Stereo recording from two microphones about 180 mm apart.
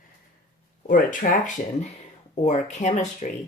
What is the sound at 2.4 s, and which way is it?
Speech, 40° left (ahead or behind).